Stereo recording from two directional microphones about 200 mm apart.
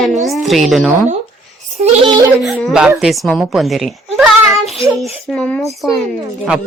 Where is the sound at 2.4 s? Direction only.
Centre (ahead or behind).